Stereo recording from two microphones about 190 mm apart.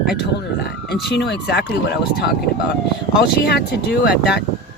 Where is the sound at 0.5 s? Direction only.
60° left (ahead or behind).